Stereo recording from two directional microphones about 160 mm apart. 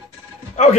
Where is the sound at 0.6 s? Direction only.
45° left (ahead or behind).